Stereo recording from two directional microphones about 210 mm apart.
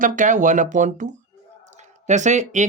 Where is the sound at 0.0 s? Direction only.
40° right (ahead or behind).